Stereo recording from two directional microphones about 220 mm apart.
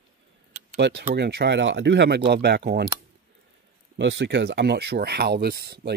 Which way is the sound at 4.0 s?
55° right (ahead or behind).